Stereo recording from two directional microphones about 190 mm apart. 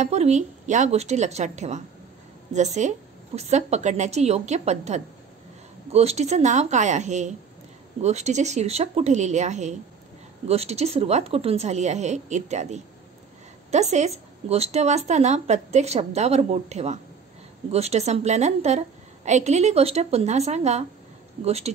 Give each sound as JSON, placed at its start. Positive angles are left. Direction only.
{"t": 0.0, "sound": "speech", "side_deg": -35}